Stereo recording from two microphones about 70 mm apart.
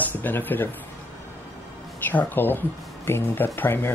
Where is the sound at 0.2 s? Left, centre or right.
Left.